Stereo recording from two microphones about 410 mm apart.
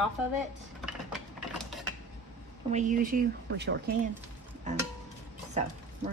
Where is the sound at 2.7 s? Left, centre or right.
Centre.